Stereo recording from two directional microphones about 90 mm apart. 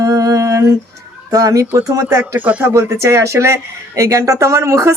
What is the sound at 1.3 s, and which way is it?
Speech, 40° right (ahead or behind).